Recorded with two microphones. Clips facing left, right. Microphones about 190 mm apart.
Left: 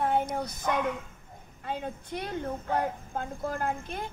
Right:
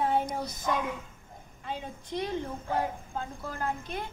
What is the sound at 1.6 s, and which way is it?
A woman's voice, 55° left (ahead or behind).